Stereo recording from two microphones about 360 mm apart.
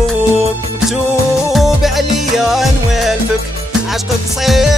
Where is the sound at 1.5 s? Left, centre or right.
Centre.